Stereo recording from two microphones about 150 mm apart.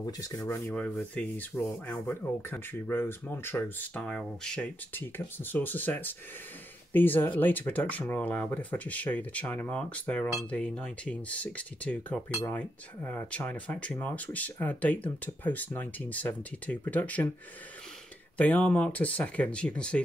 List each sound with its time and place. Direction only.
0.0 s speech: 20° left (ahead or behind)
0.7 s speech: 10° left (ahead or behind)
18.4 s speech: 10° left (ahead or behind)